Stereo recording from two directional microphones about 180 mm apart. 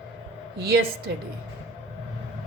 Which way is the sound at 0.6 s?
60° right (ahead or behind).